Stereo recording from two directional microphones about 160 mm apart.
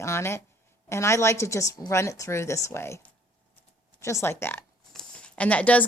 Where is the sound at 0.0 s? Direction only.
15° left (ahead or behind).